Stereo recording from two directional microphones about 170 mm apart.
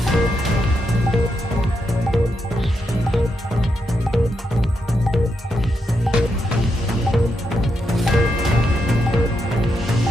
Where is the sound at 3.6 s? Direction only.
Centre (ahead or behind).